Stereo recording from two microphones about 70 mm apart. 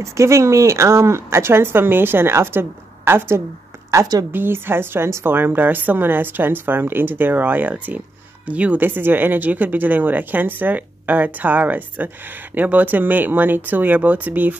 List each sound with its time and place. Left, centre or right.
0.0 s a woman's voice: right